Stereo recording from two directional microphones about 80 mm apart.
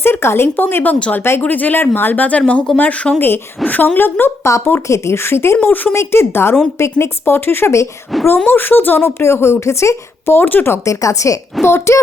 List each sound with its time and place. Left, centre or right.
0.0 s speech: left
4.4 s speech: left
5.9 s speech: left
8.1 s speech: centre
8.4 s speech: left
10.8 s speech: left
11.6 s speech: left